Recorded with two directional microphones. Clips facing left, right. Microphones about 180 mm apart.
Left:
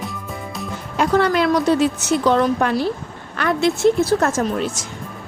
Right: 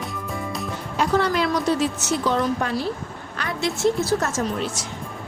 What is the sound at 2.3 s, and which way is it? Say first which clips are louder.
A woman's voice: left 5 dB; 70° left (ahead or behind).